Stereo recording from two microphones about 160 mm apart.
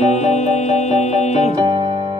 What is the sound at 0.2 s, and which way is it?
Music, 45° left (ahead or behind).